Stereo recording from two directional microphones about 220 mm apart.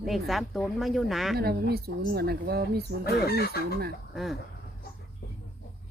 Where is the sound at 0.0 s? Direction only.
Centre (ahead or behind).